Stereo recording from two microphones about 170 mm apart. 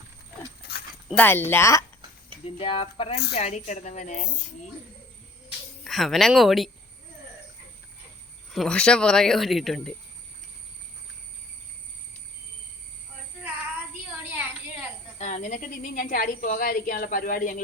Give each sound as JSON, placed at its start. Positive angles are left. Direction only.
{"t": 1.0, "sound": "speech", "side_deg": 10}
{"t": 2.4, "sound": "speech", "side_deg": 35}
{"t": 5.8, "sound": "speech", "side_deg": 0}
{"t": 8.5, "sound": "speech", "side_deg": 5}
{"t": 15.2, "sound": "speech", "side_deg": 45}